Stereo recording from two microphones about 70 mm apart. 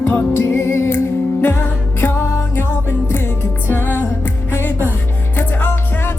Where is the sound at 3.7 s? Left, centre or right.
Left.